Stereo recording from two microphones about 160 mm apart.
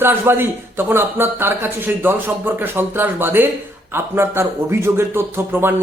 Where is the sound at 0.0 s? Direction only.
15° right (ahead or behind).